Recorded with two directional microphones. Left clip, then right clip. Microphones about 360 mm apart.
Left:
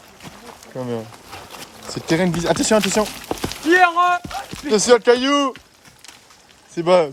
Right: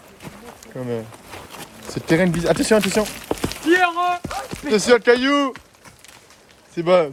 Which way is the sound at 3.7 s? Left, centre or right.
Centre.